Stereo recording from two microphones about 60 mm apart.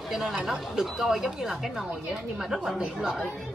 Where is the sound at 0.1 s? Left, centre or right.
Centre.